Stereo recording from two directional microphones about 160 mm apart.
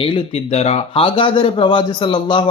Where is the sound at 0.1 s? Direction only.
40° left (ahead or behind).